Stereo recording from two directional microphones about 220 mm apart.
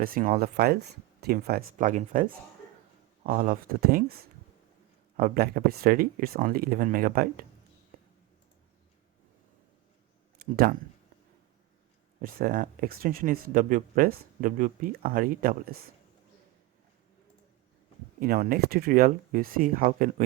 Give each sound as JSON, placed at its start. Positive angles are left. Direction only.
{"t": 0.0, "sound": "speech", "side_deg": -40}
{"t": 5.1, "sound": "speech", "side_deg": -40}
{"t": 12.2, "sound": "speech", "side_deg": -40}
{"t": 18.2, "sound": "speech", "side_deg": -40}